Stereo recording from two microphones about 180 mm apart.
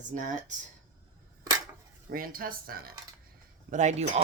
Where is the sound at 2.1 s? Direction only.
50° right (ahead or behind).